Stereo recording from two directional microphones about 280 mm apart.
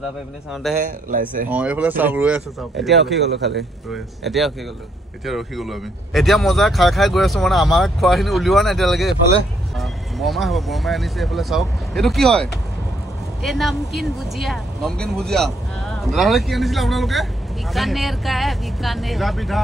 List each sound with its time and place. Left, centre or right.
0.7 s speech: centre
3.2 s speech: right
3.9 s speech: centre